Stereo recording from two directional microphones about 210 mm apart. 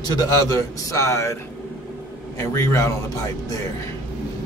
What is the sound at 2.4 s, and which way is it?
Speech, 15° left (ahead or behind).